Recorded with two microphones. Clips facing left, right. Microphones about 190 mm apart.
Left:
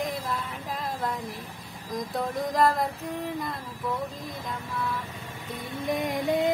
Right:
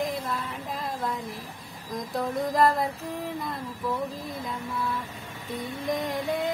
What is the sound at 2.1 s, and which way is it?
Speech, centre (ahead or behind).